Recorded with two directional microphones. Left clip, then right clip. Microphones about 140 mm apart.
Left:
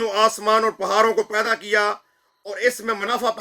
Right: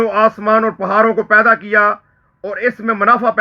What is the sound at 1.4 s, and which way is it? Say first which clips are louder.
Speech: right 10 dB; 45° left (ahead or behind).